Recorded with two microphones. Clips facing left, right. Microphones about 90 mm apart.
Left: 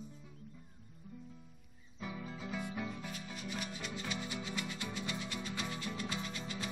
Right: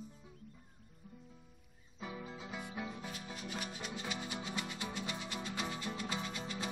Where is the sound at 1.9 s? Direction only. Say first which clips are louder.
Left 1 dB; 20° right (ahead or behind).